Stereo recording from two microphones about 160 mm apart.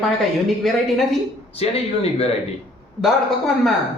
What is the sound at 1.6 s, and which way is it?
Speech, 40° left (ahead or behind).